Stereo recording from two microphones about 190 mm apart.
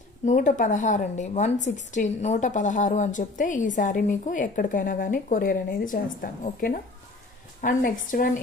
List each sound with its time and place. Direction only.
0.2 s a woman's voice: 40° left (ahead or behind)